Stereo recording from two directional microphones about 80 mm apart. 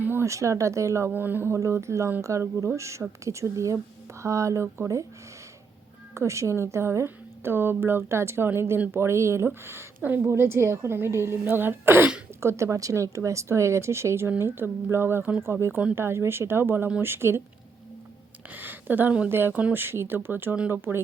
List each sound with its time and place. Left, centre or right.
0.0 s a sound: right
0.3 s speech: right
1.1 s speech: right
1.5 s speech: right
6.1 s speech: right
18.5 s speech: right